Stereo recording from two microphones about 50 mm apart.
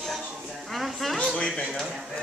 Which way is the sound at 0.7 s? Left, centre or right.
Centre.